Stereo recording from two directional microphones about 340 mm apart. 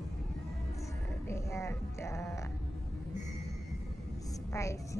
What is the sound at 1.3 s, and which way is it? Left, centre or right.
Music, centre.